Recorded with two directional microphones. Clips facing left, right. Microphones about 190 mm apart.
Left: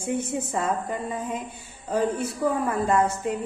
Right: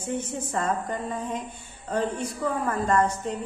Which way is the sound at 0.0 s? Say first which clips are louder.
Left 3 dB; 10° left (ahead or behind).